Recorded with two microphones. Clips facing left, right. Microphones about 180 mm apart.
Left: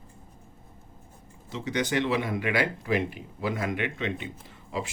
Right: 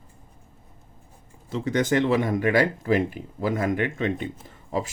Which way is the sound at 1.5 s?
50° right (ahead or behind).